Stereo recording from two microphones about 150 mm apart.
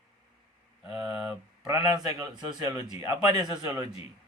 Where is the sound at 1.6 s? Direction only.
25° right (ahead or behind).